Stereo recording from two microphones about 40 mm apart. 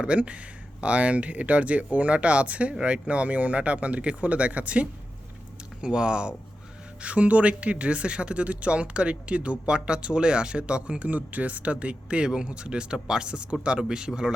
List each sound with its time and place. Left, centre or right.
0.0 s speech: right
5.8 s speech: right
11.1 s speech: right; by 14.3 s centre